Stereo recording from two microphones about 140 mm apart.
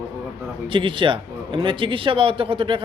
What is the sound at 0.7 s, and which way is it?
Speech, 35° right (ahead or behind).